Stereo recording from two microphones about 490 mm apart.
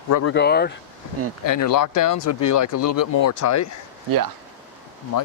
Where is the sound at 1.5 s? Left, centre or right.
Left.